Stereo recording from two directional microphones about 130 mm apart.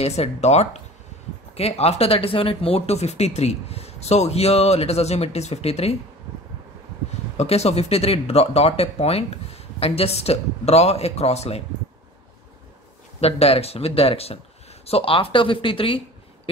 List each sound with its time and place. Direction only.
0.0 s speech: 55° left (ahead or behind)
7.3 s speech: 55° left (ahead or behind)
13.2 s speech: 50° left (ahead or behind)